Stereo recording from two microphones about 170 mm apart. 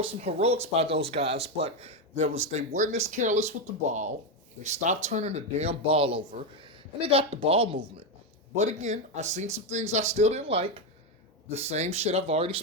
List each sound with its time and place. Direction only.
0.0 s speech: 40° right (ahead or behind)